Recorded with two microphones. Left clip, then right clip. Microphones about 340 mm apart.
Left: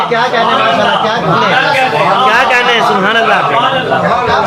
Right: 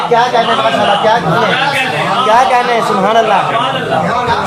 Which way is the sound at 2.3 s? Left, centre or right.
Centre.